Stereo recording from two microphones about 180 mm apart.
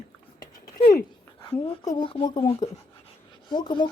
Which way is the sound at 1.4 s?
30° left (ahead or behind).